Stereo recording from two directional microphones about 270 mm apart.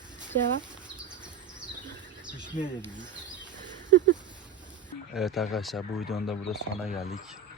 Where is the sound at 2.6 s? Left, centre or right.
Left.